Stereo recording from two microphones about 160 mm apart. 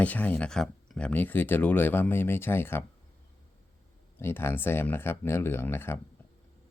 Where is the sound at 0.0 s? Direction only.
10° left (ahead or behind).